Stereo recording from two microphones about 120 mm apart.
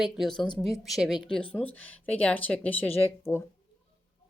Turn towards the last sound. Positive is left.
turn(degrees=20)  # may be behind; listen again after turning